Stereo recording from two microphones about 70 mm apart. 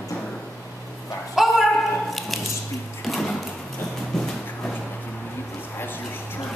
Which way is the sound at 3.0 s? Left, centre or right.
Centre.